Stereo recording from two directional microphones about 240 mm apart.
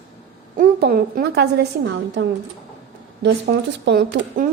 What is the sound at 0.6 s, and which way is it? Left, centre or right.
A woman's voice, right.